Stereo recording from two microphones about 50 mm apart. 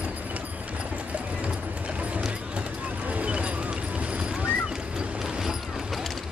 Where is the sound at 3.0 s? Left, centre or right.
Right.